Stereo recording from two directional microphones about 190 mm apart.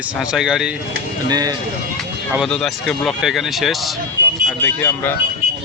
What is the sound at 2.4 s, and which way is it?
Speech, centre (ahead or behind).